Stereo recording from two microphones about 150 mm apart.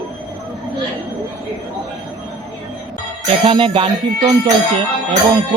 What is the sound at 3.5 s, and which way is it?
A man's voice, 35° right (ahead or behind).